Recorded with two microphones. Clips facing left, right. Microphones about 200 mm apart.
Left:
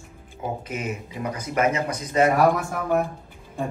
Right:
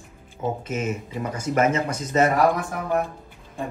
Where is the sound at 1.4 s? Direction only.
50° right (ahead or behind).